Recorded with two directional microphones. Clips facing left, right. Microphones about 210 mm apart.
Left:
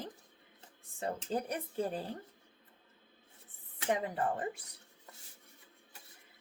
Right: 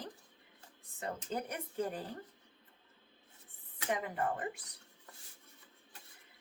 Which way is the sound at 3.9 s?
30° left (ahead or behind).